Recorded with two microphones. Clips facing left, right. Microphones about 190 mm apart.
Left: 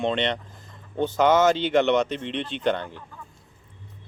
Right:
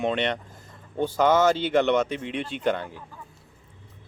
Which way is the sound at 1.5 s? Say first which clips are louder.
Left 1 dB; 10° right (ahead or behind).